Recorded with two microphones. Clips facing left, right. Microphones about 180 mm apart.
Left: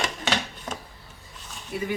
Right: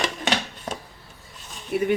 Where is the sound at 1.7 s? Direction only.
60° right (ahead or behind).